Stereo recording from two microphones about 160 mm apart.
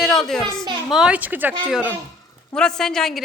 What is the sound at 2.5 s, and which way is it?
Speech, 5° left (ahead or behind).